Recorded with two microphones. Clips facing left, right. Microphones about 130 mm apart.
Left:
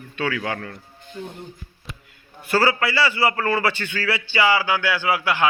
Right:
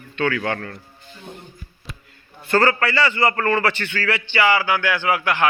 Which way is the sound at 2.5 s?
5° left (ahead or behind).